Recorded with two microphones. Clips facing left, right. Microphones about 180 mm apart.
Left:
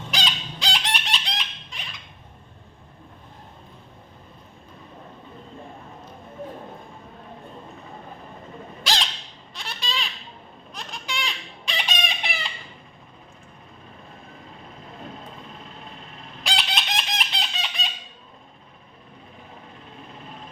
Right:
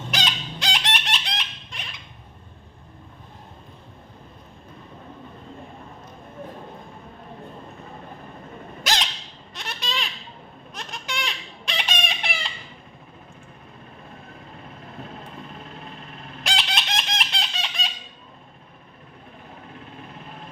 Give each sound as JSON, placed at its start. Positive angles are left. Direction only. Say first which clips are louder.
{"t": 0.1, "sound": "chicken", "louder": "right 1 dB", "side_deg": 0}
{"t": 9.6, "sound": "a sound", "louder": "right 1 dB", "side_deg": 0}
{"t": 10.8, "sound": "chicken", "louder": "even", "side_deg": 0}
{"t": 16.5, "sound": "chicken", "louder": "even", "side_deg": 0}